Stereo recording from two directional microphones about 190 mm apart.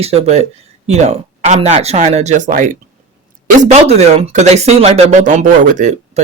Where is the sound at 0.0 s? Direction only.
35° right (ahead or behind).